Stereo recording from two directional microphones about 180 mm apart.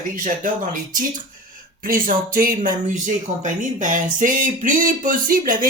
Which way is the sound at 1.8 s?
50° right (ahead or behind).